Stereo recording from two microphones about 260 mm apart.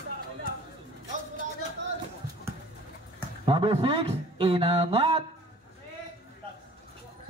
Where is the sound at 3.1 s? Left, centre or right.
Centre.